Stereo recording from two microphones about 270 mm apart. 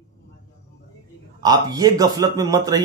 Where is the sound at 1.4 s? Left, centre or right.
Centre.